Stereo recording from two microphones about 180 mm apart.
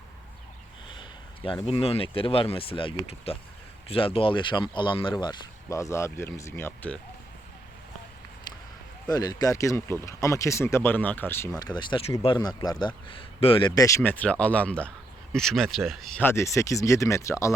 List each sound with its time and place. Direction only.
0.9 s a sound: 30° left (ahead or behind)
1.6 s speech: 35° left (ahead or behind); by 7.0 s 10° left (ahead or behind)
9.0 s speech: 20° left (ahead or behind)